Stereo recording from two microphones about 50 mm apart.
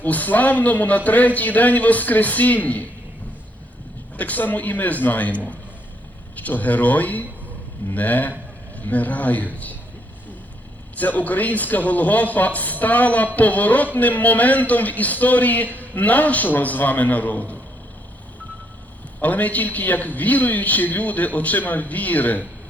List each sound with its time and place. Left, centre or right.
0.0 s a man's voice: left
4.2 s a man's voice: left
10.9 s a man's voice: left
19.2 s a man's voice: left